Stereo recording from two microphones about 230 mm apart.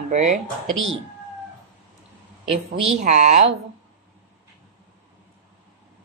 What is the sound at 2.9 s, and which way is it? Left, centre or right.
Speech, right.